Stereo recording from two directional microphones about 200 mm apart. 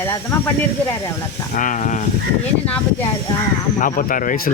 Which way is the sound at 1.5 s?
40° left (ahead or behind).